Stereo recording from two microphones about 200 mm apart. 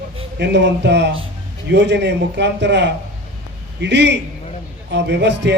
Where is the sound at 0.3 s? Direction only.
60° right (ahead or behind).